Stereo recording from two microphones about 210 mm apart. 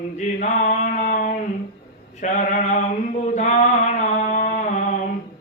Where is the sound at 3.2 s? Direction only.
35° left (ahead or behind).